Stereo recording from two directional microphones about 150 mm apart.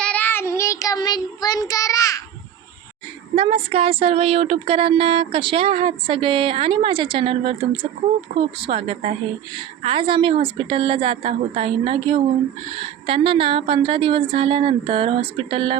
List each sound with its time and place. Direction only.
0.0 s child singing: 10° left (ahead or behind)
3.3 s speech: 40° right (ahead or behind)